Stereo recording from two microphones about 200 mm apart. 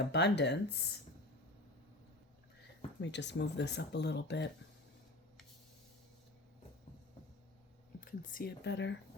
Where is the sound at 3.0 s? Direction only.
60° left (ahead or behind).